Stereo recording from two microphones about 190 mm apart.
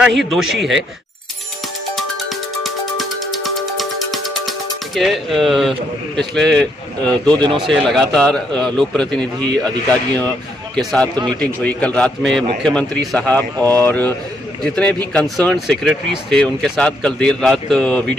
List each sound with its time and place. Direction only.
0.0 s speech: centre (ahead or behind)
2.0 s music: centre (ahead or behind)
7.4 s a man's voice: 25° right (ahead or behind)
7.7 s a man's voice: centre (ahead or behind)